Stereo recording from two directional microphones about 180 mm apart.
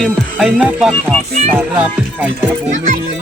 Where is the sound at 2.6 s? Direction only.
45° right (ahead or behind).